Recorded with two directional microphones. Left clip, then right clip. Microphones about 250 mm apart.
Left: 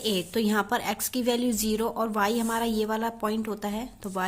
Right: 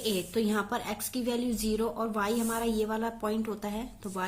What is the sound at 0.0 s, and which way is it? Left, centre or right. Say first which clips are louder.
A woman's voice: left 3 dB; left.